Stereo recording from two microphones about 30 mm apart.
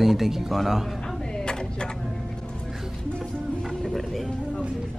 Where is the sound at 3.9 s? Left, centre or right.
Centre.